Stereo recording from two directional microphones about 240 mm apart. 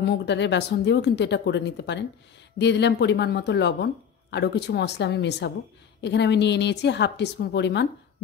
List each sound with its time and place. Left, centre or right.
0.0 s speech: left